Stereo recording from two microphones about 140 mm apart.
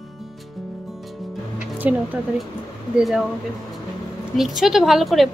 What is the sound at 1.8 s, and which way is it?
A woman's voice, 10° right (ahead or behind).